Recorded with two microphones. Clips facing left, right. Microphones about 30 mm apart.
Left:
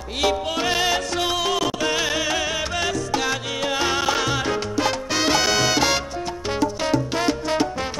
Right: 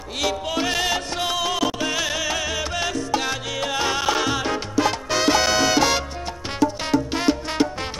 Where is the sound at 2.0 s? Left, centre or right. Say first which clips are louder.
Left 2 dB; centre.